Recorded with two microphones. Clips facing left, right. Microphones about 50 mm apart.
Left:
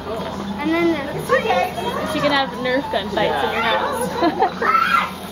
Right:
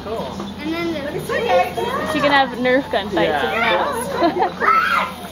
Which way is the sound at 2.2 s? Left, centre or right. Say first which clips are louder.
Right 4 dB; centre.